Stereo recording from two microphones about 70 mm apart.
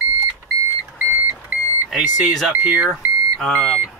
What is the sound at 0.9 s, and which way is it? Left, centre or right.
Alarm clock, right.